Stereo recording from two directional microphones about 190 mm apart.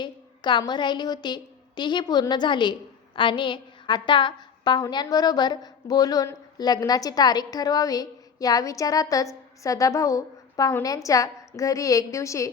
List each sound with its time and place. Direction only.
0.0 s a woman's voice: 25° left (ahead or behind)